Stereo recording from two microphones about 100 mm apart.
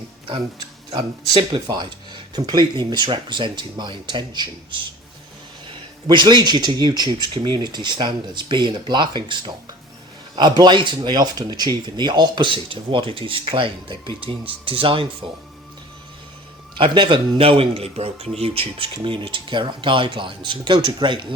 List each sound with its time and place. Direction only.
0.9 s speech: 65° right (ahead or behind)
1.7 s speech: 45° right (ahead or behind); by 15.0 s 65° right (ahead or behind)
16.7 s a man's voice: 55° right (ahead or behind)